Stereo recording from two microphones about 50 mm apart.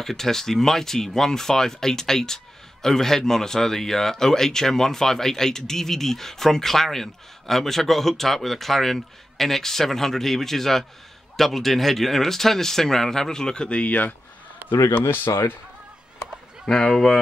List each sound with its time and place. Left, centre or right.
0.0 s speech: centre; by 14.1 s left
14.6 s a sound: right
15.0 s speech: left
16.6 s speech: centre